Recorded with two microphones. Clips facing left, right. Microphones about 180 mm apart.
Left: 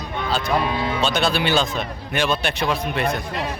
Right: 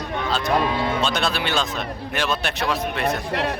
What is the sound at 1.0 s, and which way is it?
Speech, centre (ahead or behind).